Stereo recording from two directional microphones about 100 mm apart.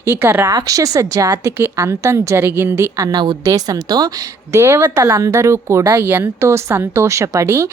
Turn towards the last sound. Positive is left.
turn(degrees=-30)  # may be behind; listen again after turning